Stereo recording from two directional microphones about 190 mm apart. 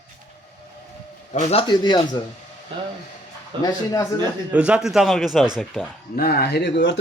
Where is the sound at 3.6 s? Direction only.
15° left (ahead or behind).